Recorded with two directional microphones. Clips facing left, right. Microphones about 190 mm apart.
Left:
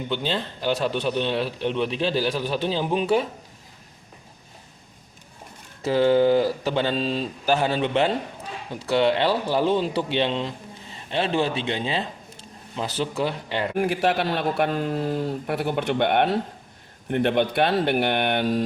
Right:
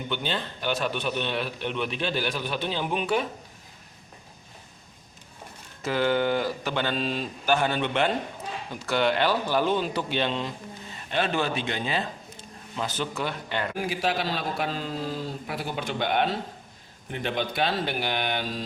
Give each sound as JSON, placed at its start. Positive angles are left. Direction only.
{"t": 0.1, "sound": "a man's voice", "side_deg": 30}
{"t": 5.8, "sound": "a man's voice", "side_deg": 30}
{"t": 13.7, "sound": "a man's voice", "side_deg": 60}